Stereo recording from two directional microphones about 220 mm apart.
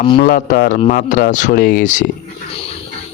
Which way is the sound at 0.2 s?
40° left (ahead or behind).